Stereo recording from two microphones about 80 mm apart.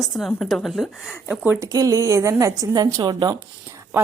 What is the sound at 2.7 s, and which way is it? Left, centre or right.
Speech, right.